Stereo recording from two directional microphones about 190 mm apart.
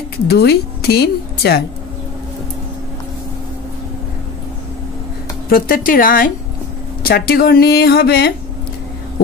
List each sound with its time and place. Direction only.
0.3 s a woman's voice: 60° left (ahead or behind)
5.5 s speech: 50° left (ahead or behind)